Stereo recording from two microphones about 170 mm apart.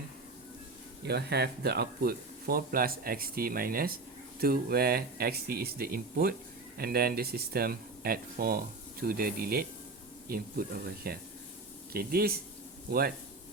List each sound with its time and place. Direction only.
1.0 s speech: 70° right (ahead or behind)